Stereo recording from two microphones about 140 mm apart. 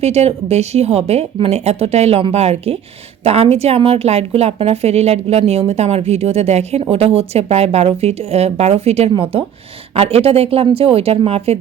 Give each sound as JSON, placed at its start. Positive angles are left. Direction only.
{"t": 0.0, "sound": "a woman's voice", "side_deg": -50}